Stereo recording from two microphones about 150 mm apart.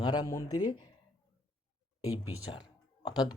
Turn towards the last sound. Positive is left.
turn(degrees=30)  # may be behind; listen again after turning